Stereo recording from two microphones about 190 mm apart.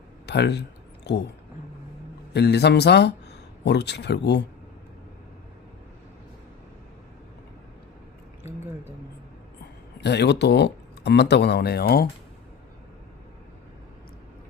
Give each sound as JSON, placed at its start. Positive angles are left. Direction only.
{"t": 0.3, "sound": "speech", "side_deg": 60}
{"t": 2.3, "sound": "speech", "side_deg": 60}
{"t": 10.0, "sound": "speech", "side_deg": 65}